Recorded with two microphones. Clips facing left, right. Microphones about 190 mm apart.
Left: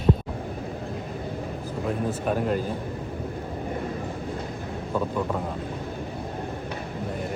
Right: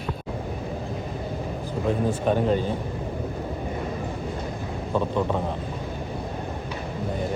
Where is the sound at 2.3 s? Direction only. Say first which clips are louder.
Right 3 dB; 5° left (ahead or behind).